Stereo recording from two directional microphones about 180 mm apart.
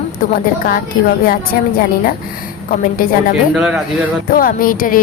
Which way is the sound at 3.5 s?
5° right (ahead or behind).